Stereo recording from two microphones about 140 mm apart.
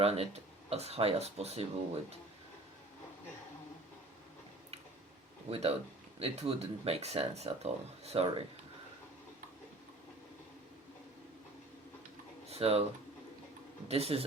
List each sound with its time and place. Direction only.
0.0 s speech: 45° right (ahead or behind)
5.5 s speech: 45° right (ahead or behind)
12.5 s speech: 45° right (ahead or behind)
13.8 s speech: 45° right (ahead or behind)